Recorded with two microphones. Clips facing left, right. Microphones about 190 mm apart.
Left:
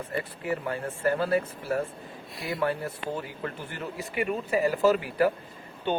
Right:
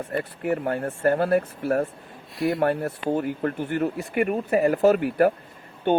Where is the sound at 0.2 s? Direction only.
55° right (ahead or behind).